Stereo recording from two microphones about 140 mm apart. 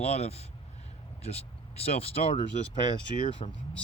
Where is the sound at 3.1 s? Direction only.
65° left (ahead or behind).